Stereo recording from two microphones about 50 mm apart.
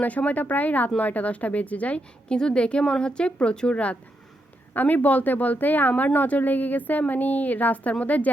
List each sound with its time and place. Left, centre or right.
0.0 s a woman's voice: left
2.3 s a woman's voice: centre
4.7 s a woman's voice: left